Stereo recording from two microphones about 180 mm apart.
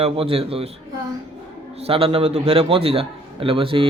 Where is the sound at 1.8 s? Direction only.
30° right (ahead or behind).